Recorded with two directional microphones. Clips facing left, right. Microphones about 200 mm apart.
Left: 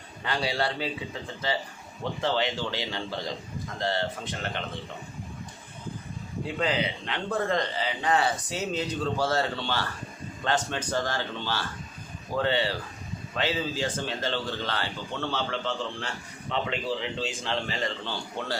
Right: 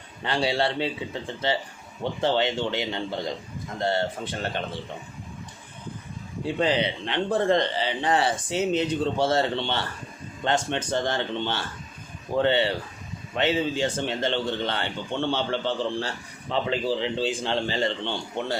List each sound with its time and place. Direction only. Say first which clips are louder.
0.2 s speech: right 4 dB; 25° right (ahead or behind)
2.2 s speech: right 4 dB; 25° right (ahead or behind)
6.4 s speech: right 4 dB; 30° right (ahead or behind)